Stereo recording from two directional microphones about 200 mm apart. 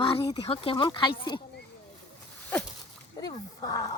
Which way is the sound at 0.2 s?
20° left (ahead or behind).